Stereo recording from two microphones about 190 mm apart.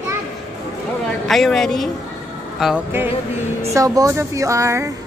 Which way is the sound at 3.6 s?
15° right (ahead or behind).